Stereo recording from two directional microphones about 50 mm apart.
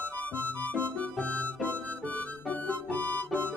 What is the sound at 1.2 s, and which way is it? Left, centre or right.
Harmonica, left.